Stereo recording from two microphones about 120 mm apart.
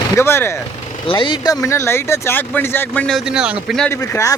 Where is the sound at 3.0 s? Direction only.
Centre (ahead or behind).